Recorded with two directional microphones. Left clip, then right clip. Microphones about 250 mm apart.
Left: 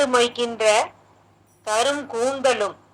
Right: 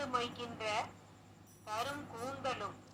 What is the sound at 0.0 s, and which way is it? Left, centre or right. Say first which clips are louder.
A woman's voice: left 19 dB; left.